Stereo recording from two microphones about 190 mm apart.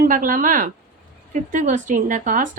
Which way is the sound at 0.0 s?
45° right (ahead or behind).